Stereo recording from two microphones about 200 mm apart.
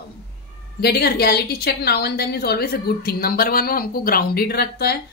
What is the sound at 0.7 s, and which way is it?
A woman's voice, 55° left (ahead or behind).